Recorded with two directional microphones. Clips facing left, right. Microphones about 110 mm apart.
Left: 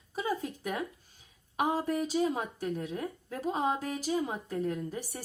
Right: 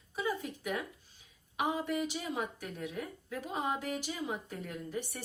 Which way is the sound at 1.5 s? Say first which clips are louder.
Left 3 dB; 40° left (ahead or behind).